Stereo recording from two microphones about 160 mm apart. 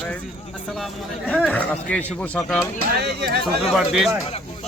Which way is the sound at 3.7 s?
Centre (ahead or behind).